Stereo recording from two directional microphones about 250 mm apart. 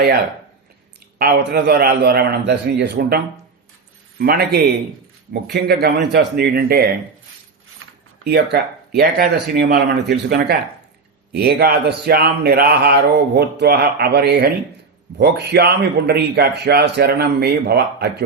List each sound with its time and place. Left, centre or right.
1.2 s speech: right
4.2 s speech: right
8.2 s speech: right